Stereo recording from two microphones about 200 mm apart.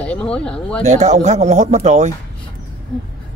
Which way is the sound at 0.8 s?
35° right (ahead or behind).